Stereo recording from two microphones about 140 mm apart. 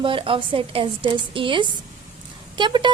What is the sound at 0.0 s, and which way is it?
A woman's voice, 40° right (ahead or behind).